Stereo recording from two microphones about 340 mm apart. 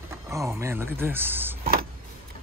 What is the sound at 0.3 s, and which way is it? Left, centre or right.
Speech, centre.